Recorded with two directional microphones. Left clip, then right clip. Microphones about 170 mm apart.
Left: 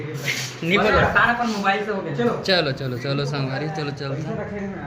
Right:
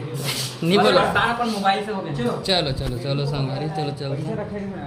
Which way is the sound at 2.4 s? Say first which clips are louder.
Left 1 dB; centre (ahead or behind).